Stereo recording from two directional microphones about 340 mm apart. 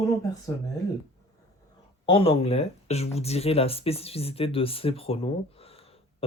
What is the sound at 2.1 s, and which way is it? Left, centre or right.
Speech, centre.